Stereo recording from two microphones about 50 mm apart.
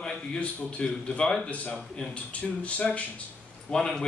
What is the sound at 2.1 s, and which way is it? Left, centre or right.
A man's voice, left.